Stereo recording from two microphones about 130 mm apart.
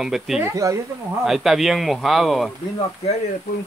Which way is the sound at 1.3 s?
Centre (ahead or behind).